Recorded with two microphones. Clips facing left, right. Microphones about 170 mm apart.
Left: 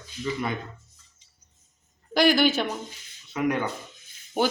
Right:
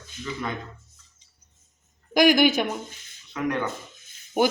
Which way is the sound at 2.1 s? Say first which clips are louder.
Right 2 dB; 15° right (ahead or behind).